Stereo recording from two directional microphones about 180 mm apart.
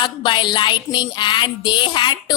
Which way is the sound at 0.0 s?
25° left (ahead or behind).